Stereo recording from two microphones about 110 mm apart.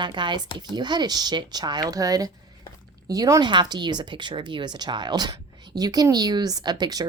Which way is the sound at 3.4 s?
45° right (ahead or behind).